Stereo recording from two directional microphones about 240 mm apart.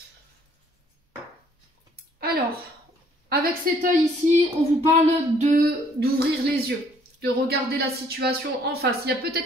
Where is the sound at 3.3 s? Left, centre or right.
Right.